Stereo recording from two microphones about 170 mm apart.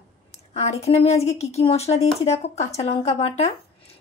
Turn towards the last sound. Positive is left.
turn(degrees=35)  # may be behind; listen again after turning